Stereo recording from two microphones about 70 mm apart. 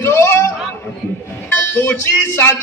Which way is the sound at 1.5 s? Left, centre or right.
Left.